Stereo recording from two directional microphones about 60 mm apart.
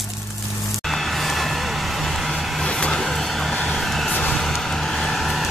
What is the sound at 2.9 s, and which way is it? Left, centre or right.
Vehicle, centre.